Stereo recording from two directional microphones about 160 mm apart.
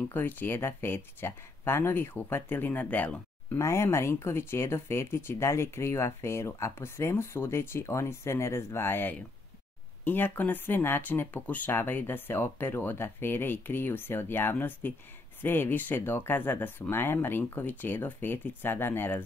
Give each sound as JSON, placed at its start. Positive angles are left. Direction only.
{"t": 0.1, "sound": "speech", "side_deg": 10}